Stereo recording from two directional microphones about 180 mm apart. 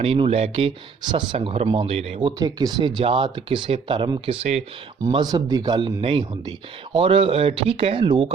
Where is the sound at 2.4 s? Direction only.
20° right (ahead or behind).